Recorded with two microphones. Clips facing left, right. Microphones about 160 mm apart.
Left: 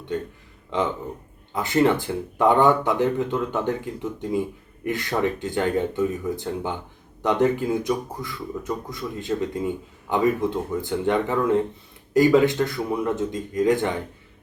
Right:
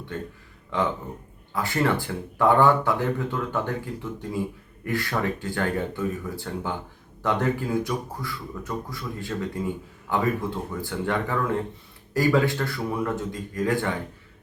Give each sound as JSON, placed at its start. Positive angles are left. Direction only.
{"t": 0.7, "sound": "speech", "side_deg": 20}